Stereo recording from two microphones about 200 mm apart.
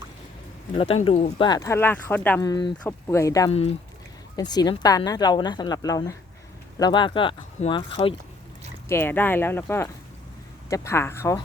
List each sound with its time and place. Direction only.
0.8 s a woman's voice: 30° left (ahead or behind)
1.5 s speech: 15° left (ahead or behind)
2.4 s a woman's voice: 20° left (ahead or behind)
8.9 s speech: 10° left (ahead or behind)